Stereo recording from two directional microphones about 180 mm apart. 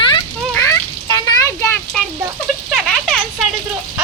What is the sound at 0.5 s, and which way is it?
Children playing, 15° left (ahead or behind).